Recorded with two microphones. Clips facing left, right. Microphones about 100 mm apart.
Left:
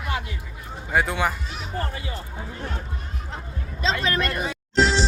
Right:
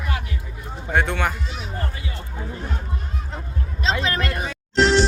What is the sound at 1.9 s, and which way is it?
Music, 30° left (ahead or behind).